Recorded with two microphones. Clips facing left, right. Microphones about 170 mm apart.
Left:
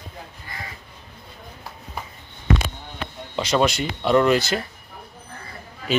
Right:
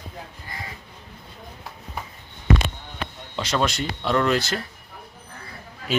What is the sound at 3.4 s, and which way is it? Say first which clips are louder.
Speech: left 4 dB; centre (ahead or behind).